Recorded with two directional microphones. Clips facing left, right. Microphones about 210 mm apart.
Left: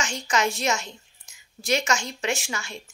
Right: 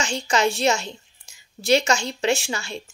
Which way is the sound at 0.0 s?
30° right (ahead or behind).